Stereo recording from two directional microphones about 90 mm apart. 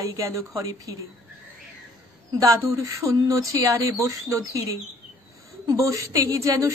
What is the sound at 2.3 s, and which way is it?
A woman's voice, 35° right (ahead or behind).